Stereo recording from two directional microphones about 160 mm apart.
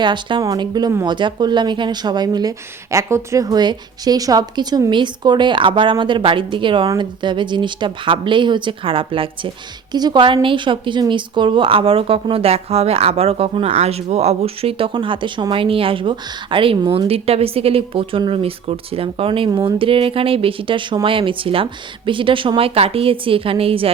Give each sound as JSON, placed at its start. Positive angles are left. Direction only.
{"t": 0.0, "sound": "speech", "side_deg": -30}